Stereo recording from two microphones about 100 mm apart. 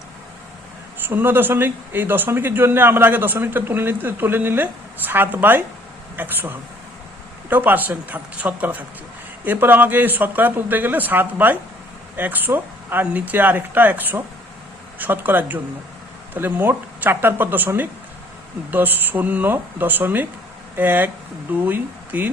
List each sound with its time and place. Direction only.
1.0 s speech: 20° right (ahead or behind)
7.5 s speech: 20° right (ahead or behind)